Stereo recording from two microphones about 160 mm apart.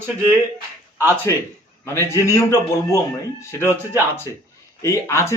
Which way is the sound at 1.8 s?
15° left (ahead or behind).